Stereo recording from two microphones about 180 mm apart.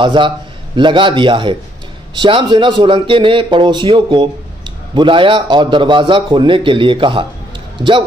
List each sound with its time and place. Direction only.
0.0 s speech: 25° right (ahead or behind)